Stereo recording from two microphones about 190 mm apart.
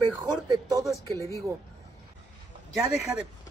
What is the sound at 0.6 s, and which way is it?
Speech, 20° right (ahead or behind).